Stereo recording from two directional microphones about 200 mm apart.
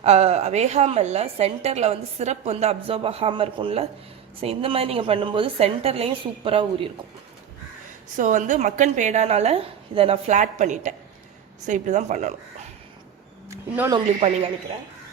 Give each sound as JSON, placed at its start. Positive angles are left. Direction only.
{"t": 0.0, "sound": "a woman's voice", "side_deg": -30}
{"t": 8.1, "sound": "a woman's voice", "side_deg": -40}
{"t": 13.5, "sound": "speech", "side_deg": -15}
{"t": 14.2, "sound": "a woman's voice", "side_deg": -30}